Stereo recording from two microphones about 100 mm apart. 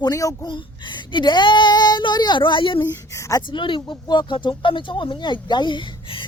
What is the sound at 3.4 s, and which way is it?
Speech, 55° left (ahead or behind).